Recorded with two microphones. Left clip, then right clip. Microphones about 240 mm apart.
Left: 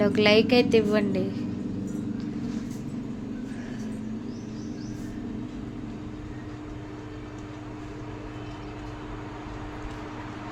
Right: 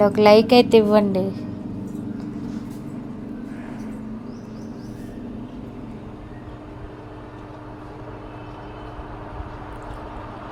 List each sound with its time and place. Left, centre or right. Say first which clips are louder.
0.0 s a woman's voice: right 7 dB; centre